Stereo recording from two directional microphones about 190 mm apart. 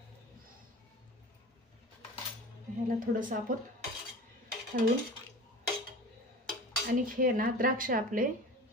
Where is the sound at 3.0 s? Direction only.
45° right (ahead or behind).